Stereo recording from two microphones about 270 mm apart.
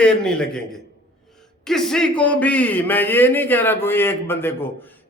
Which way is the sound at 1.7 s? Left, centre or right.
Centre.